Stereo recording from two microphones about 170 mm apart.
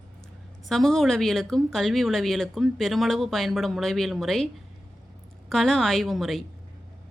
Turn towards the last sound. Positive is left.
turn(degrees=0)  # may be behind; listen again after turning